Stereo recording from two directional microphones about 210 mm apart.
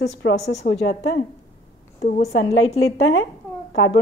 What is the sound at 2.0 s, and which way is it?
Speech, 40° left (ahead or behind).